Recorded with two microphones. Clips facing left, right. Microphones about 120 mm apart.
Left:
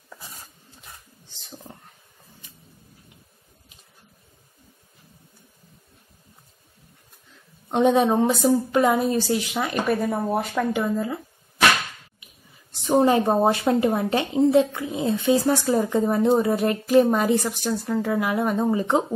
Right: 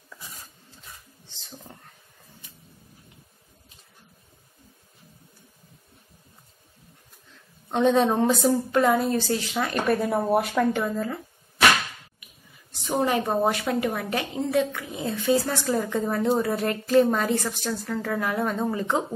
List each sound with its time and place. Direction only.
1.6 s a sound: 25° left (ahead or behind)
7.7 s a woman's voice: 15° left (ahead or behind)
9.8 s speech: centre (ahead or behind)
12.8 s a woman's voice: 30° left (ahead or behind)